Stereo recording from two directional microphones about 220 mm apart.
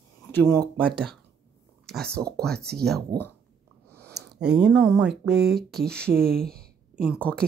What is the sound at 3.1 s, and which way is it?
Speech, 20° right (ahead or behind).